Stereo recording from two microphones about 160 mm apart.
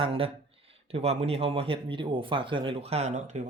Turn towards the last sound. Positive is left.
turn(degrees=-45)  # may be behind; listen again after turning